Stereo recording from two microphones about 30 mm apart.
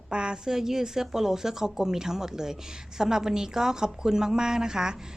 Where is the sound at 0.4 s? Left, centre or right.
Centre.